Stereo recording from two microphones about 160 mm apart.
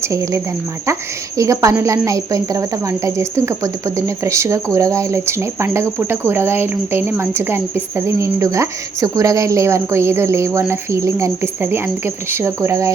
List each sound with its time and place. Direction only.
0.0 s a woman's voice: 20° right (ahead or behind)